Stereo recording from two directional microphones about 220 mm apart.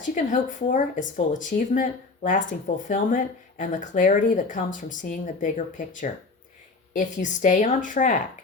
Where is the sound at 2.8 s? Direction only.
35° left (ahead or behind).